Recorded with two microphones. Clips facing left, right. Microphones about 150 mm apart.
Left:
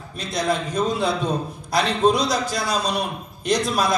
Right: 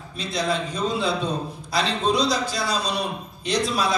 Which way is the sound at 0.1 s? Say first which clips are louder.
Left 2 dB; 45° left (ahead or behind).